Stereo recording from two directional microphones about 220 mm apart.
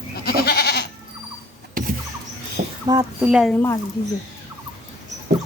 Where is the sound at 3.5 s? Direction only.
15° left (ahead or behind).